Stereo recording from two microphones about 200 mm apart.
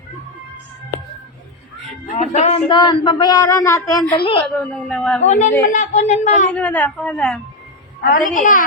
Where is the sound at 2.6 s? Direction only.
20° left (ahead or behind).